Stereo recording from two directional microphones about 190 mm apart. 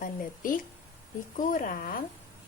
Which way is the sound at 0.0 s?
45° left (ahead or behind).